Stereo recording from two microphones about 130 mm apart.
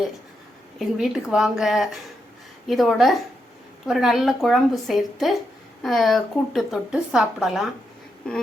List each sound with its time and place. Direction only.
0.8 s a woman's voice: centre (ahead or behind)